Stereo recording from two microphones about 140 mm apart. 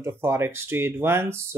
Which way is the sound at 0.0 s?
15° right (ahead or behind).